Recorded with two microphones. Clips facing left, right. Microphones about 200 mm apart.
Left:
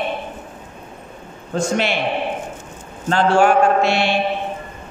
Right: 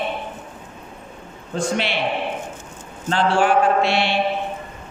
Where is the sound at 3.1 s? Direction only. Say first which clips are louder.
Left 3 dB; 45° left (ahead or behind).